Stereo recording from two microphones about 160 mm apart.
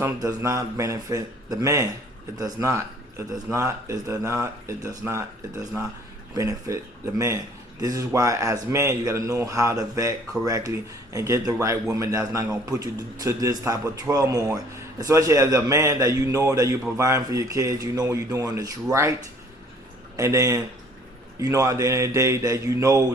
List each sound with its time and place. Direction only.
0.0 s a man's voice: 20° right (ahead or behind)
6.3 s a man's voice: 20° right (ahead or behind)
20.1 s a man's voice: 20° right (ahead or behind)